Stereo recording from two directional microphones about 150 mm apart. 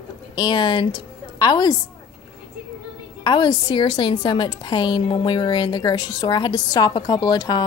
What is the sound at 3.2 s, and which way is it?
A woman's voice, 30° left (ahead or behind).